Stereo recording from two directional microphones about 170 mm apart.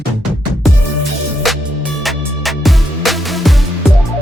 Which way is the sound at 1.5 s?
Centre (ahead or behind).